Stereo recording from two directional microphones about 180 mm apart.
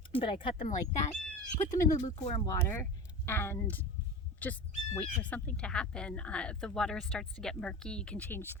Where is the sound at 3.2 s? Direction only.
10° left (ahead or behind).